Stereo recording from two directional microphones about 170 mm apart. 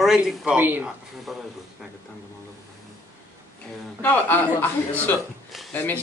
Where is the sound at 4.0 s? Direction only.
10° left (ahead or behind).